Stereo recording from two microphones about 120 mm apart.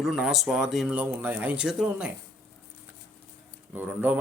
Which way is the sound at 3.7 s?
15° right (ahead or behind).